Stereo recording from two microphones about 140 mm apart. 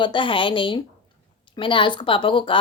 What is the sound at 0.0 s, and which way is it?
A woman's voice, 35° left (ahead or behind).